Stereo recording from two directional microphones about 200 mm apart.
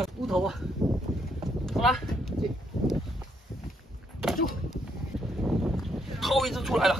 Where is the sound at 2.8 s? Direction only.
20° left (ahead or behind).